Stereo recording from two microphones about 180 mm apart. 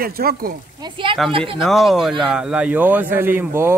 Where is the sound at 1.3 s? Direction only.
30° right (ahead or behind).